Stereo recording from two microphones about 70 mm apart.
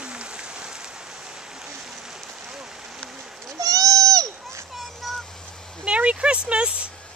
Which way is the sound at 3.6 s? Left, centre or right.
Right.